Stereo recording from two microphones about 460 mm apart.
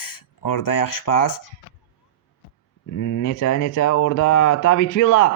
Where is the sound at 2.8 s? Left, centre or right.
Left.